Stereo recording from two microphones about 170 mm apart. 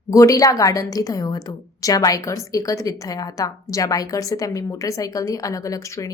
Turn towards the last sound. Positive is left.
turn(degrees=20)  # may be behind; listen again after turning